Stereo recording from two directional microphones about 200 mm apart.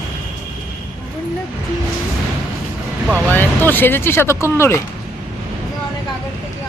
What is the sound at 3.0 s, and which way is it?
Speech, 10° right (ahead or behind).